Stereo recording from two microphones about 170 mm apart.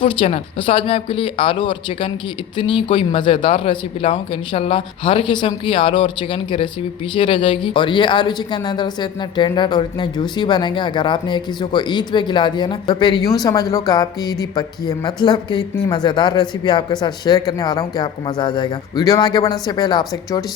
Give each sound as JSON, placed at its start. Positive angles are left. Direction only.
{"t": 0.0, "sound": "speech", "side_deg": 30}